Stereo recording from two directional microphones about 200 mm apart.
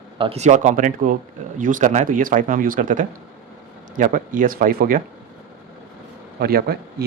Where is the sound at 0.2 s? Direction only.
30° right (ahead or behind).